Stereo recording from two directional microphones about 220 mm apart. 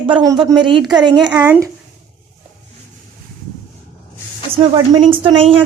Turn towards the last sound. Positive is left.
turn(degrees=-25)  # may be behind; listen again after turning